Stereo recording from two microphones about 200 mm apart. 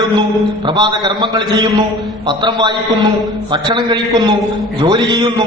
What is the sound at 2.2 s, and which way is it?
A man's voice, 20° right (ahead or behind).